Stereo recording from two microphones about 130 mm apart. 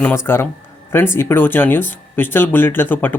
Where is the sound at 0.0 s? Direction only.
15° left (ahead or behind).